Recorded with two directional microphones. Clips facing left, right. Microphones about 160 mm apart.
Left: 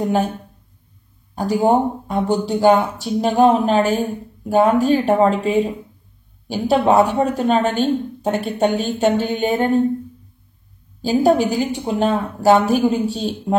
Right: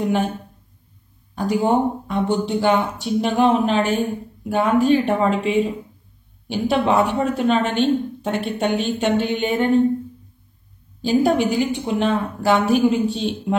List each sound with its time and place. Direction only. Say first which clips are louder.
0.0 s speech: left 2 dB; 40° left (ahead or behind)
1.3 s speech: left 2 dB; 35° left (ahead or behind)
11.0 s speech: left 2 dB; 40° left (ahead or behind)